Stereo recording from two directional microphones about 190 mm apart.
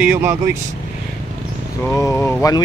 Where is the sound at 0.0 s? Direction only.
10° right (ahead or behind).